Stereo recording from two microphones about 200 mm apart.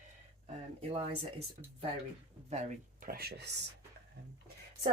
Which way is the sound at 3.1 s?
50° right (ahead or behind).